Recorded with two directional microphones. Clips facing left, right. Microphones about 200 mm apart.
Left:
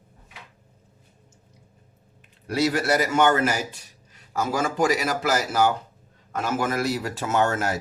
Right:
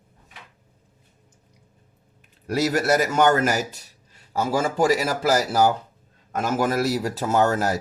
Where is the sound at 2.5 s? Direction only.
45° right (ahead or behind).